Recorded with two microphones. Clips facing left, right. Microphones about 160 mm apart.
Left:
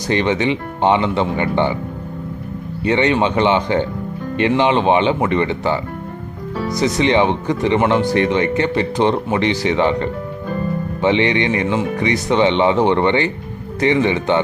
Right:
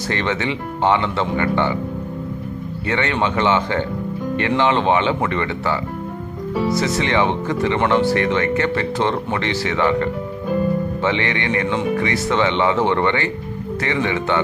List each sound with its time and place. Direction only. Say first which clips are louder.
0.1 s speech: left 6 dB; 20° left (ahead or behind)
2.8 s speech: left 5 dB; 20° left (ahead or behind)